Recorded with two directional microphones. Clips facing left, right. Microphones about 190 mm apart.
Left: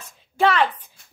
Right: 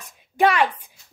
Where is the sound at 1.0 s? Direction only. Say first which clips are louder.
Right 2 dB; 55° left (ahead or behind).